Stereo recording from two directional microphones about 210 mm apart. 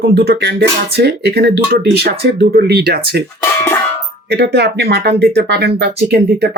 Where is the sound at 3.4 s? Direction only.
10° left (ahead or behind).